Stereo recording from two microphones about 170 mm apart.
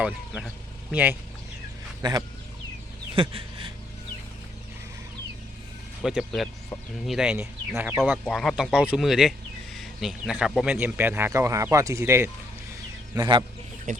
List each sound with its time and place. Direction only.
0.0 s speech: centre (ahead or behind)
2.0 s chicken: 20° right (ahead or behind)
3.2 s a sound: 35° right (ahead or behind)
6.0 s speech: centre (ahead or behind)
8.2 s speech: centre (ahead or behind); by 12.3 s 15° right (ahead or behind)
13.1 s speech: 25° right (ahead or behind)
13.9 s speech: 50° right (ahead or behind)